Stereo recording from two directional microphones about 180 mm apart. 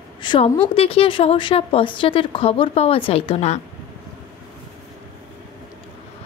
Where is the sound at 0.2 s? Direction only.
30° left (ahead or behind).